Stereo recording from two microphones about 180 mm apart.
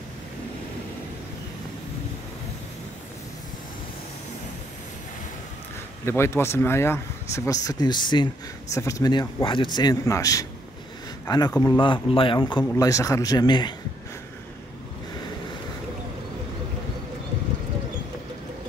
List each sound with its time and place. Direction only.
6.0 s a man's voice: 15° left (ahead or behind)